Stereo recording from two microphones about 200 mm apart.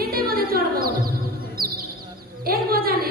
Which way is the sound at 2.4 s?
50° right (ahead or behind).